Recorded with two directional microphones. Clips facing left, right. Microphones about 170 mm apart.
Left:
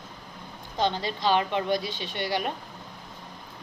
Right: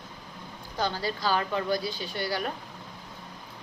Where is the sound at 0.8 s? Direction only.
25° left (ahead or behind).